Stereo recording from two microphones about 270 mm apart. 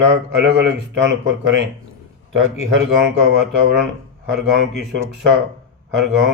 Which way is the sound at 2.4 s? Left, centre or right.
Right.